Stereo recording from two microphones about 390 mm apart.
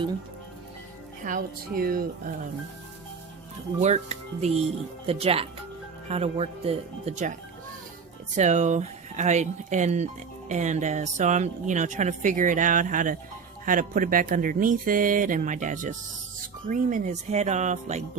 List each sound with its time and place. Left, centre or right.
1.2 s speech: centre
3.8 s speech: centre
8.4 s speech: centre